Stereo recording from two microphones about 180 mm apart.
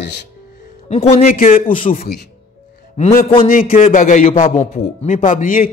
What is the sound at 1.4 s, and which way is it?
Speech, 50° left (ahead or behind).